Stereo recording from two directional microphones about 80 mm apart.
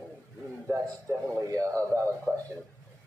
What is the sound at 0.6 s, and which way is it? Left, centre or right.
A man's voice, right.